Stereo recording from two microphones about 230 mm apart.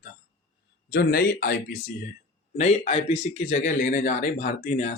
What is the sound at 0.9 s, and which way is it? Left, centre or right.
Speech, left.